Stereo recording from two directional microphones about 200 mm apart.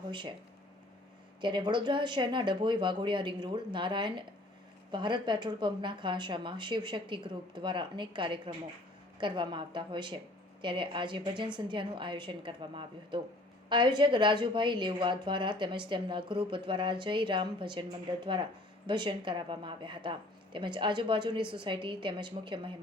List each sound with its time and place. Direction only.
0.0 s speech: 25° right (ahead or behind)
1.4 s a woman's voice: 25° right (ahead or behind)